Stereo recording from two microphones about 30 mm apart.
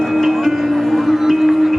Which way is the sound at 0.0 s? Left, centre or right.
Centre.